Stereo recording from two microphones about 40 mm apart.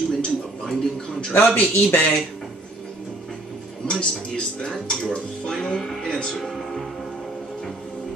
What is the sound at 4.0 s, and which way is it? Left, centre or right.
Speech, left.